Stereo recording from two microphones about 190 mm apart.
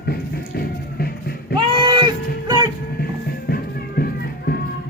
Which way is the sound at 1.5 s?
25° right (ahead or behind).